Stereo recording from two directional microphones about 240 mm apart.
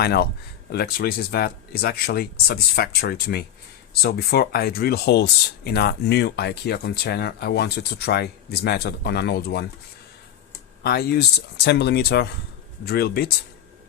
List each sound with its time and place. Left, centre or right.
0.0 s speech: left
10.8 s speech: left